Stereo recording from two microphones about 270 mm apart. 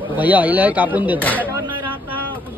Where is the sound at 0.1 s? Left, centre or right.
Centre.